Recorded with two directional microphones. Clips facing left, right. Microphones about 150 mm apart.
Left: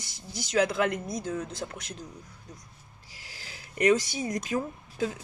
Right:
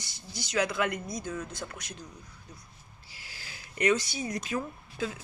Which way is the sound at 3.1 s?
40° left (ahead or behind).